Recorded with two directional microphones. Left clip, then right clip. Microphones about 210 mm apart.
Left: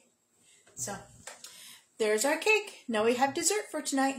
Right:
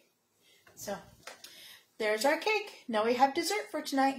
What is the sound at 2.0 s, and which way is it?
Speech, 20° left (ahead or behind).